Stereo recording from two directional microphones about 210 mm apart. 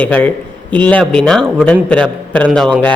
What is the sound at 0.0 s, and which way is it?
A woman's voice, 5° left (ahead or behind).